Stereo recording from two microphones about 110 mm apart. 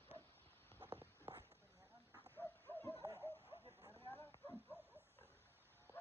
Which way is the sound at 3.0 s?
30° right (ahead or behind).